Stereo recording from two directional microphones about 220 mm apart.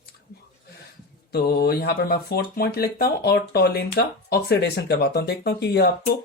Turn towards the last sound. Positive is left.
turn(degrees=45)  # may be behind; listen again after turning